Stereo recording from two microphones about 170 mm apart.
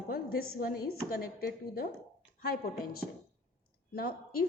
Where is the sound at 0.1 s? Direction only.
60° left (ahead or behind).